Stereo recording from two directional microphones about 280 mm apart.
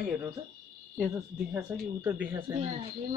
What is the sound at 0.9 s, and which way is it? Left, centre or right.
Speech, centre.